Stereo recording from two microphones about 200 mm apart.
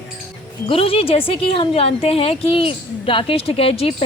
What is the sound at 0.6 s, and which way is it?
A woman's voice, 25° left (ahead or behind).